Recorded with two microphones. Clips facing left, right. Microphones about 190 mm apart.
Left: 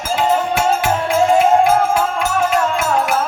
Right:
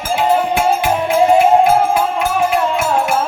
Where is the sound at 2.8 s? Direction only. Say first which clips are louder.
Right 1 dB; 25° right (ahead or behind).